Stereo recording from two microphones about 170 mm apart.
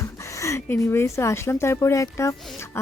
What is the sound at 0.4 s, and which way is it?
A woman's voice, 15° left (ahead or behind).